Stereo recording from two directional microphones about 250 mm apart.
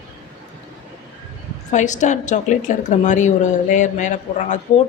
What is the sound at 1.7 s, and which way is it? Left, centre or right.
A woman's voice, left.